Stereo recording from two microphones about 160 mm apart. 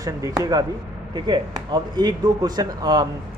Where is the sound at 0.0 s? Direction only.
20° right (ahead or behind).